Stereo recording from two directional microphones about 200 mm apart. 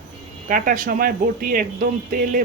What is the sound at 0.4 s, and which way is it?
Speech, 40° right (ahead or behind).